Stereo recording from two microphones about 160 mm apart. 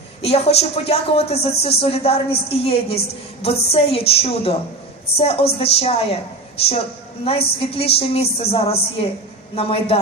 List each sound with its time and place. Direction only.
0.2 s speech: 40° left (ahead or behind)
7.3 s speech: 35° left (ahead or behind)